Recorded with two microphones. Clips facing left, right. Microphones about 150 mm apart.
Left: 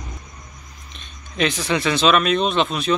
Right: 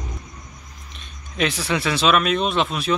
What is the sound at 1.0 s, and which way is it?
Speech, 5° right (ahead or behind).